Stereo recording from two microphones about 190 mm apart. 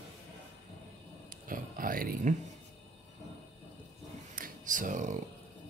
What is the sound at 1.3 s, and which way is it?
Speech, 45° right (ahead or behind).